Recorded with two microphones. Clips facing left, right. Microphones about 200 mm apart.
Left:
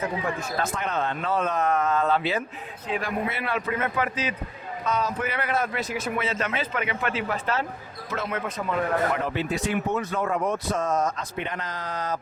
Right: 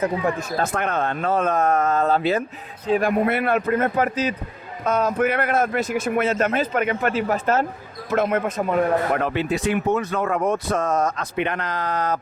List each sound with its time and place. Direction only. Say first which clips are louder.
0.6 s speech: right 5 dB; 55° right (ahead or behind); by 3.1 s 40° right (ahead or behind)
3.2 s speech: right 8 dB; 55° right (ahead or behind)